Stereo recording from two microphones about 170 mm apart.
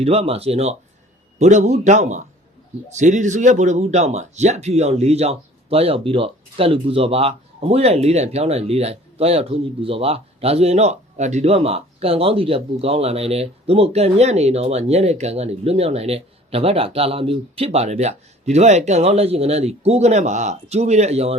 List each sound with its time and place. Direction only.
0.0 s a man's voice: 35° right (ahead or behind)